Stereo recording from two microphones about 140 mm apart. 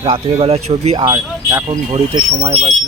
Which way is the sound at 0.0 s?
45° right (ahead or behind).